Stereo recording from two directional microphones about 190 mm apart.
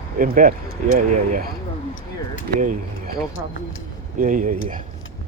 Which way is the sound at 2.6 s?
45° right (ahead or behind).